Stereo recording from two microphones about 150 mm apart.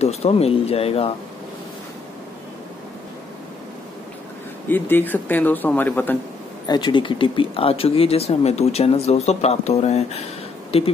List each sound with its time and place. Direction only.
0.0 s speech: 45° left (ahead or behind)
4.6 s a man's voice: 15° left (ahead or behind)
6.7 s speech: 30° left (ahead or behind)